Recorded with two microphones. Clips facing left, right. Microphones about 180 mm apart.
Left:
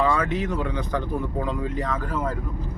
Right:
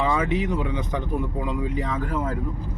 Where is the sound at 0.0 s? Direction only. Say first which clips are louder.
Even; 20° right (ahead or behind).